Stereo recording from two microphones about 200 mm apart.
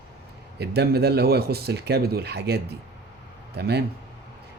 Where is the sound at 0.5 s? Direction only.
55° right (ahead or behind).